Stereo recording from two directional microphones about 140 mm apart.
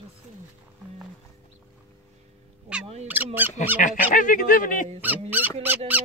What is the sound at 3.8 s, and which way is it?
Fowl, 65° left (ahead or behind).